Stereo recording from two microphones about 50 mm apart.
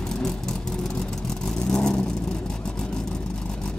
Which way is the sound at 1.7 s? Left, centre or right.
Centre.